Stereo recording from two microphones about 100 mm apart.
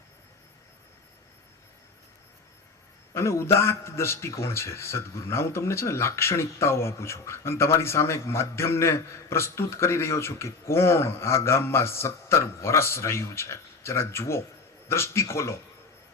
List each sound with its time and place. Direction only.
3.2 s a man's voice: 25° left (ahead or behind)